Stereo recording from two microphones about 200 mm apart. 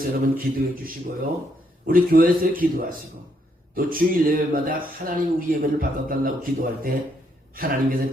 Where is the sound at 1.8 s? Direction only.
45° right (ahead or behind).